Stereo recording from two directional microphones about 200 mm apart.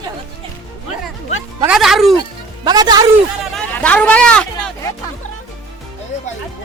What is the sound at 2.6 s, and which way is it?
Speech, 20° right (ahead or behind).